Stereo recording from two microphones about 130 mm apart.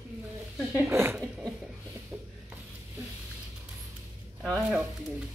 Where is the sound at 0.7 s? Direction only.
20° right (ahead or behind).